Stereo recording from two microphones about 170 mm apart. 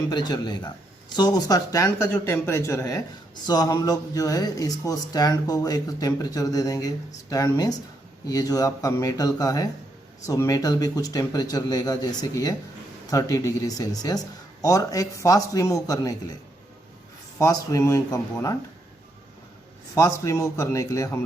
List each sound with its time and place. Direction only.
0.1 s speech: 25° left (ahead or behind)
17.4 s speech: 20° left (ahead or behind)
20.0 s speech: 20° left (ahead or behind)